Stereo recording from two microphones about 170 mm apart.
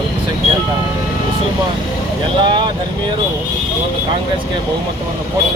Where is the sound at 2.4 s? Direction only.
30° right (ahead or behind).